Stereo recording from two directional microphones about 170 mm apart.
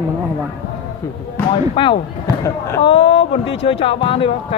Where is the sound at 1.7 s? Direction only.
30° left (ahead or behind).